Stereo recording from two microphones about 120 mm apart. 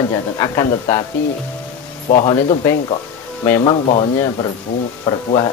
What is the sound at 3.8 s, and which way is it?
Speech, 55° left (ahead or behind).